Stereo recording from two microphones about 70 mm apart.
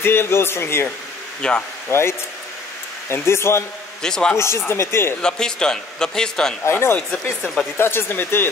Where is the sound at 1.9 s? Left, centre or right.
Left.